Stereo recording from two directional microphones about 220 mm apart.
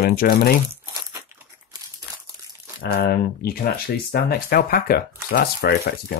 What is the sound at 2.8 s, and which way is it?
Speech, 45° left (ahead or behind).